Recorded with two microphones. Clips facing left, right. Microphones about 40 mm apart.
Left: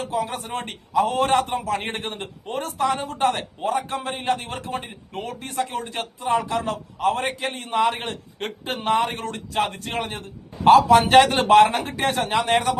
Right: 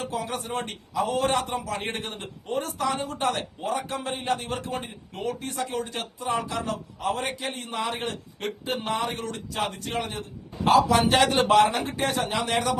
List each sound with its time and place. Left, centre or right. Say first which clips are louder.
0.2 s a man's voice: left 3 dB; left